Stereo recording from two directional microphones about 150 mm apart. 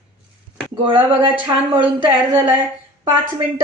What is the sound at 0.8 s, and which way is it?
Speech, 35° right (ahead or behind).